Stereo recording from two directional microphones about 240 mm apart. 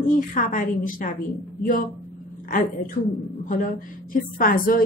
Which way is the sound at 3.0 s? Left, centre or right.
Left.